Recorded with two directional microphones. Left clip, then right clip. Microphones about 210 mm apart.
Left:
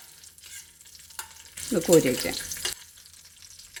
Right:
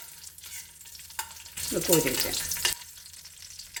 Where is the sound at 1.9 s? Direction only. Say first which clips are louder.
Left 6 dB; 50° left (ahead or behind).